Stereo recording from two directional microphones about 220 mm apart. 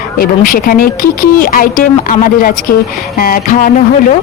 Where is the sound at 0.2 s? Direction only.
40° left (ahead or behind).